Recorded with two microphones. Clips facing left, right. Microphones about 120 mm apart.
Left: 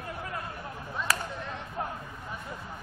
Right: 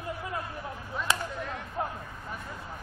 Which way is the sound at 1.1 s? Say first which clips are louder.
Right 2 dB; 25° right (ahead or behind).